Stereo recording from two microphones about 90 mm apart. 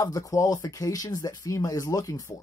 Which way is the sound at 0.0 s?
40° left (ahead or behind).